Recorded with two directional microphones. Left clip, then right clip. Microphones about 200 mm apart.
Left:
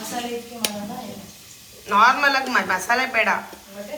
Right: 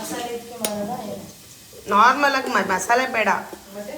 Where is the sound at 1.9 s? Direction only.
15° right (ahead or behind).